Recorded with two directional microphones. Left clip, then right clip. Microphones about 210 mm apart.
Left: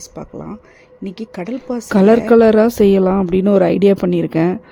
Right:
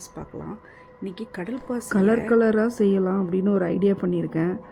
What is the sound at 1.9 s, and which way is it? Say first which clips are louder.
Speech: left 10 dB; 35° left (ahead or behind).